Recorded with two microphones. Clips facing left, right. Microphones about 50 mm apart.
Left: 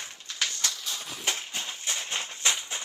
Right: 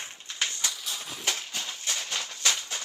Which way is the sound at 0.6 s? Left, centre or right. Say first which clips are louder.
Even; centre.